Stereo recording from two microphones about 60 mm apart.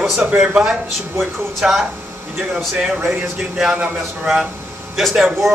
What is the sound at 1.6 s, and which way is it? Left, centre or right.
Speech, centre.